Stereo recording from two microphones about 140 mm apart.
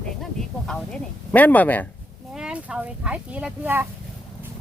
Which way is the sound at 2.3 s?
5° right (ahead or behind).